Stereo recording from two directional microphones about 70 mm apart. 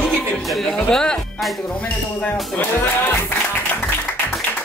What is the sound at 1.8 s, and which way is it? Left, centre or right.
Speech, left.